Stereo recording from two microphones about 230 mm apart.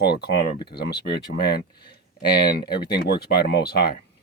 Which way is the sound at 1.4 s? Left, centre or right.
Left.